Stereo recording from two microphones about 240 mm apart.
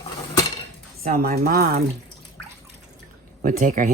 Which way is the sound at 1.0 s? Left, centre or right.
Right.